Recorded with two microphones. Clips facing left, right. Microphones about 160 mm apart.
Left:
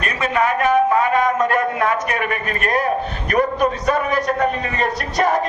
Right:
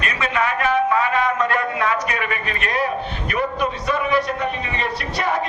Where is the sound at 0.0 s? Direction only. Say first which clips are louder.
Left 3 dB; 45° left (ahead or behind).